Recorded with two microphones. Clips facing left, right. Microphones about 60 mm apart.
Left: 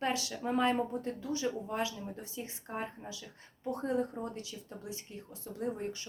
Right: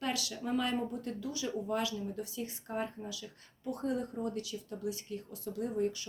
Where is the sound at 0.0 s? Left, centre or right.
Left.